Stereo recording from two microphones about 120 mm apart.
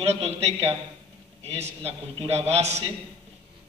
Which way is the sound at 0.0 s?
60° right (ahead or behind).